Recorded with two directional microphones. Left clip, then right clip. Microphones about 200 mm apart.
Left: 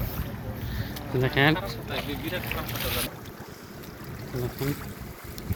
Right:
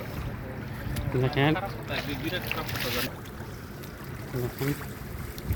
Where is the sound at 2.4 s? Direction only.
35° right (ahead or behind).